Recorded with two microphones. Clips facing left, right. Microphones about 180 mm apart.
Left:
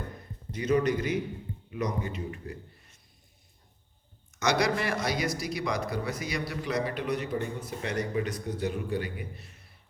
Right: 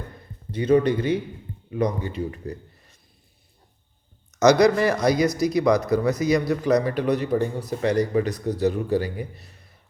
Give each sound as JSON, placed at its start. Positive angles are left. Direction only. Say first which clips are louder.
{"t": 0.5, "sound": "speech", "louder": "right 7 dB", "side_deg": -30}
{"t": 4.4, "sound": "speech", "louder": "right 11 dB", "side_deg": -40}